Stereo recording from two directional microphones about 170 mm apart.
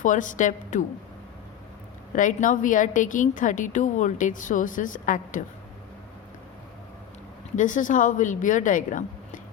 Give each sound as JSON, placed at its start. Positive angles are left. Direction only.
{"t": 0.0, "sound": "a woman's voice", "side_deg": 50}
{"t": 2.1, "sound": "a woman's voice", "side_deg": 50}
{"t": 7.5, "sound": "a woman's voice", "side_deg": 50}